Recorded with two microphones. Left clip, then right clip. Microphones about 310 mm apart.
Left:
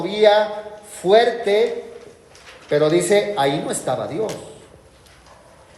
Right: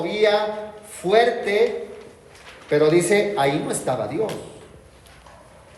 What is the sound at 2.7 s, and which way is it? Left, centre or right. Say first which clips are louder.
Speech: left 1 dB; left.